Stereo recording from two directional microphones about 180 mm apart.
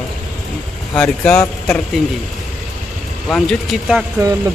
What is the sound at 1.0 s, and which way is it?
Speech, 5° left (ahead or behind).